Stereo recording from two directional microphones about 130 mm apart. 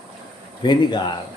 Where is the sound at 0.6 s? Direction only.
35° left (ahead or behind).